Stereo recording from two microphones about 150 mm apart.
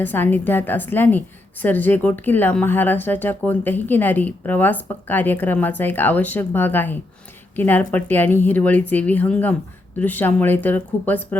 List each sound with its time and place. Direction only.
0.0 s a woman's voice: 15° left (ahead or behind)